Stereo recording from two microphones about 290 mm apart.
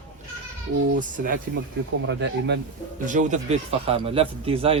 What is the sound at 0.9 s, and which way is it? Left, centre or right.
Speech, right.